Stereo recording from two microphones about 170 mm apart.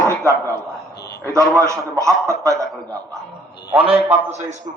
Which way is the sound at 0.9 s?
75° left (ahead or behind).